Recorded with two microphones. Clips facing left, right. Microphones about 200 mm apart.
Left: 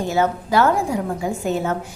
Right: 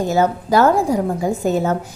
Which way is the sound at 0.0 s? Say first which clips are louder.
Right 3 dB; 40° right (ahead or behind).